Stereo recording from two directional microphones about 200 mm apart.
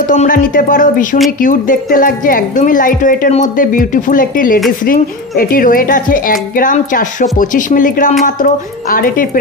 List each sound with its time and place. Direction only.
0.1 s speech: 40° left (ahead or behind)